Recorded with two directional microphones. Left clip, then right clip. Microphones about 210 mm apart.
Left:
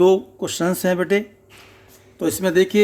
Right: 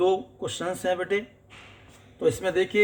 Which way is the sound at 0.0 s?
55° left (ahead or behind).